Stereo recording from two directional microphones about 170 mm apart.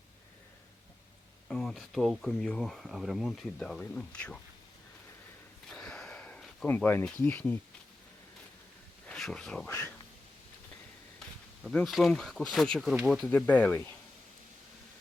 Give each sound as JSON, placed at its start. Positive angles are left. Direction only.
{"t": 1.5, "sound": "speech", "side_deg": 5}
{"t": 5.6, "sound": "a sound", "side_deg": 5}
{"t": 9.0, "sound": "speech", "side_deg": 5}
{"t": 9.6, "sound": "speech", "side_deg": 15}
{"t": 11.6, "sound": "speech", "side_deg": 0}